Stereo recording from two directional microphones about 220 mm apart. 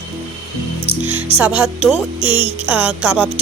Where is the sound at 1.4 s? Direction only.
5° right (ahead or behind).